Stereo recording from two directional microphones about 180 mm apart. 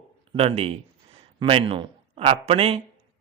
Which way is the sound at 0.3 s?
35° right (ahead or behind).